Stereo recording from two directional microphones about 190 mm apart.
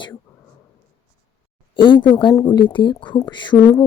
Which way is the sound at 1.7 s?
25° left (ahead or behind).